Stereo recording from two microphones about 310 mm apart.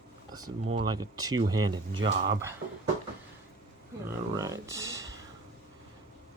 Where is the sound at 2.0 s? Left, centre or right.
Right.